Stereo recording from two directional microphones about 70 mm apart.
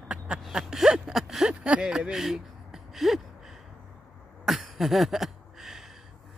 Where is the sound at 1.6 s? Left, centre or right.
Centre.